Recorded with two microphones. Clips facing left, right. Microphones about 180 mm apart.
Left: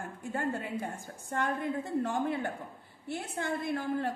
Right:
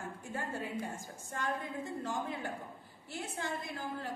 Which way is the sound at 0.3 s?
60° left (ahead or behind).